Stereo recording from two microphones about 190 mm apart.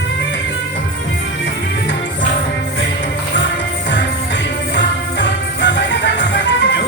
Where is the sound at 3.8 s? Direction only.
70° left (ahead or behind).